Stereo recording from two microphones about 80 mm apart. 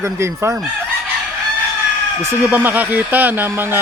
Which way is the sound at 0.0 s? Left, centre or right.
Right.